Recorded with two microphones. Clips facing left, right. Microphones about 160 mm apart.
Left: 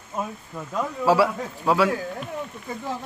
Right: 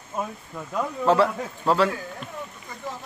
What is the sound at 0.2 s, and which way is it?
Speech, 5° left (ahead or behind).